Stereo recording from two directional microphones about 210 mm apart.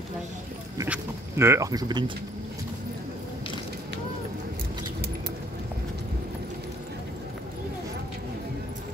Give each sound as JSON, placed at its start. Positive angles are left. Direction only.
{"t": 0.8, "sound": "speech", "side_deg": -10}